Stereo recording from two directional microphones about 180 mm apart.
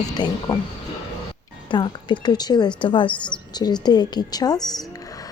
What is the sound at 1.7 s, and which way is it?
Speech, 25° left (ahead or behind).